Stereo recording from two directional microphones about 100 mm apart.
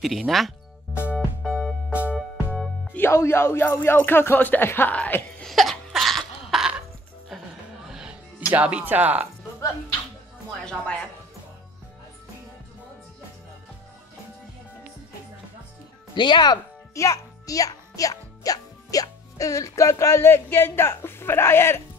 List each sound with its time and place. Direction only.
0.0 s speech: centre (ahead or behind)
1.1 s music: centre (ahead or behind)
1.9 s music: 15° right (ahead or behind)
2.1 s music: centre (ahead or behind)
2.9 s speech: 25° left (ahead or behind)
5.5 s a sound: centre (ahead or behind)
7.9 s music: 5° right (ahead or behind)
8.5 s speech: 10° right (ahead or behind)
10.6 s a woman's voice: 10° left (ahead or behind)
16.2 s speech: 50° left (ahead or behind)
16.9 s a child's voice: 35° left (ahead or behind)